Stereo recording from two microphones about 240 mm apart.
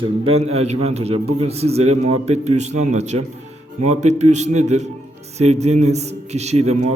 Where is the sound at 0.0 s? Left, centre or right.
Right.